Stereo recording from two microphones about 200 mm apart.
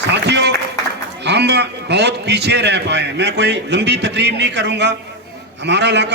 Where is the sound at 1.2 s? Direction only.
55° right (ahead or behind).